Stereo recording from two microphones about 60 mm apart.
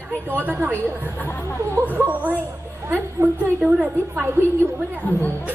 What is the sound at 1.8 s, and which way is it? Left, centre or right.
A woman's voice, right.